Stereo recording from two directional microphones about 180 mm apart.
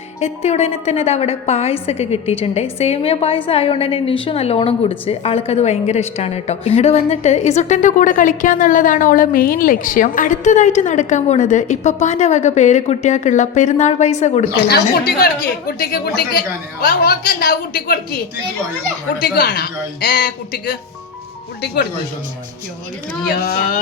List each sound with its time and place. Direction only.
0.2 s a woman's voice: 35° left (ahead or behind)
14.7 s a woman's voice: 60° left (ahead or behind)
19.2 s a woman's voice: 60° left (ahead or behind)
23.3 s a woman's voice: 55° left (ahead or behind)